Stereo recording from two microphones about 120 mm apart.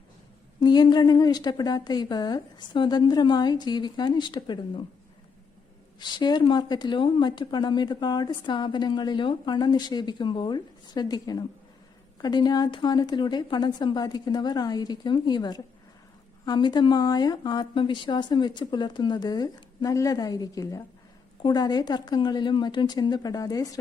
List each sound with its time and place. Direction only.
0.6 s speech: 35° left (ahead or behind)
6.0 s speech: 40° left (ahead or behind)